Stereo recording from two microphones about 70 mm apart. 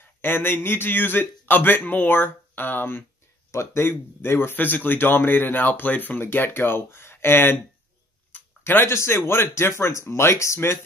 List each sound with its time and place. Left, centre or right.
0.2 s a man's voice: left